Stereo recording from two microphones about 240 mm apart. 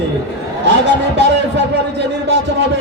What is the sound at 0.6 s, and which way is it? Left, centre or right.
Speech, right.